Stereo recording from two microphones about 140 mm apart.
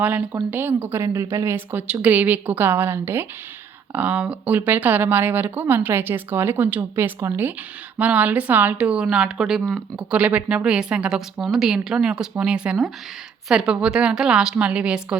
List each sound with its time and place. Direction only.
0.0 s a woman's voice: 10° right (ahead or behind)